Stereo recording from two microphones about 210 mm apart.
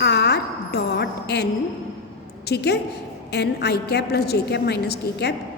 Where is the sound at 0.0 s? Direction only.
50° left (ahead or behind).